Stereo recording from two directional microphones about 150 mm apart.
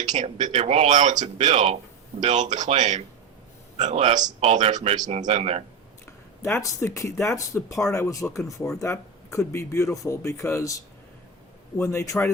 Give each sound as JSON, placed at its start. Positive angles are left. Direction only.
{"t": 0.1, "sound": "speech", "side_deg": -55}
{"t": 0.5, "sound": "speech", "side_deg": -45}
{"t": 6.1, "sound": "a sound", "side_deg": 15}
{"t": 6.8, "sound": "speech", "side_deg": 20}